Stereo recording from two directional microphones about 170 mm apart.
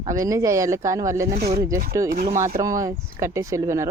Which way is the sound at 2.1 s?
55° right (ahead or behind).